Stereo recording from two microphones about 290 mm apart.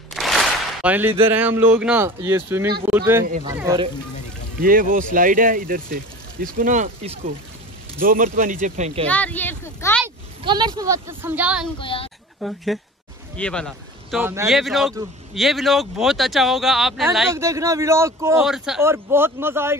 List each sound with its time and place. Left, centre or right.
0.1 s a sound: centre
1.3 s speech: centre
4.6 s speech: right
9.0 s speech: centre
10.0 s a sound: centre
10.8 s speech: centre
11.8 s a child's voice: centre
12.4 s speech: centre